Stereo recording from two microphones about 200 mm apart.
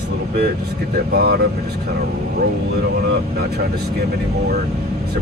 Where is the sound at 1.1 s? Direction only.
55° right (ahead or behind).